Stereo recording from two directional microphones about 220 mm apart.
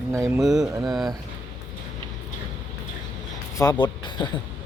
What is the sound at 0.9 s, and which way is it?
Speech, centre (ahead or behind).